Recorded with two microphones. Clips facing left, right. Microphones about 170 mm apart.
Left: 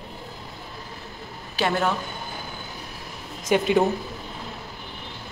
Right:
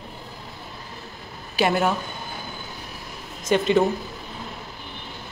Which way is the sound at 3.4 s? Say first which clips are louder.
Right 1 dB; 10° left (ahead or behind).